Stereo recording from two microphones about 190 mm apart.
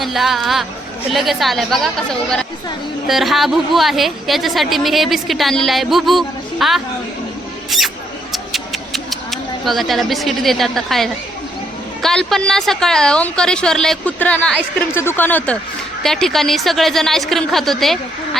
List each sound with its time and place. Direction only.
0.0 s a woman's voice: centre (ahead or behind)
8.3 s a sound: centre (ahead or behind)
12.0 s a woman's voice: centre (ahead or behind)